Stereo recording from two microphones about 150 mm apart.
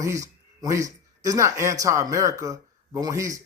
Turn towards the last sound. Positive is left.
turn(degrees=-20)  # may be behind; listen again after turning